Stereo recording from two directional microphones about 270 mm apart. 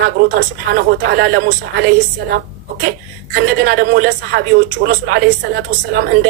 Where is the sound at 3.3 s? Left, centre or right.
Right.